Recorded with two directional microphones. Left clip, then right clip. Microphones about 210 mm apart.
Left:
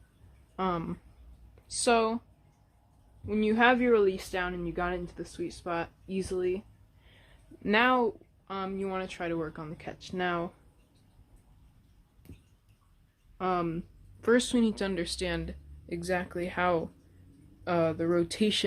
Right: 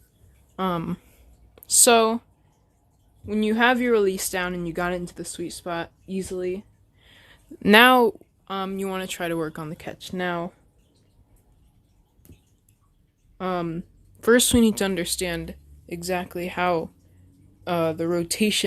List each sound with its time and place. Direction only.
0.5 s speech: 40° right (ahead or behind)
1.5 s speech: 55° right (ahead or behind)
3.2 s speech: 40° right (ahead or behind)
7.6 s speech: 55° right (ahead or behind); by 10.5 s 35° right (ahead or behind)
13.4 s speech: 35° right (ahead or behind)